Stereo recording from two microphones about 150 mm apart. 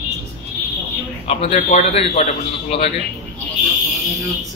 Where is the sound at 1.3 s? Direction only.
45° left (ahead or behind).